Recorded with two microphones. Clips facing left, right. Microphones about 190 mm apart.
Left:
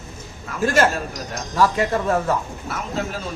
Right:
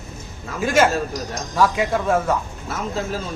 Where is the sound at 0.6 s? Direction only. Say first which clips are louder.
Right 1 dB; centre (ahead or behind).